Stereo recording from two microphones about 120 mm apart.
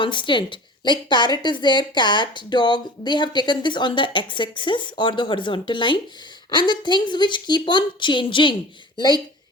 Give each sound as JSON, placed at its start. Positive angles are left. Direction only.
{"t": 0.0, "sound": "speech", "side_deg": 45}